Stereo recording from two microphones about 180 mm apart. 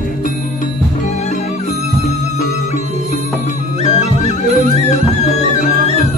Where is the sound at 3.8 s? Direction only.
35° left (ahead or behind).